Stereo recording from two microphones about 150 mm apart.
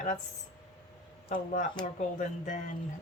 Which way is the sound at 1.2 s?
55° left (ahead or behind).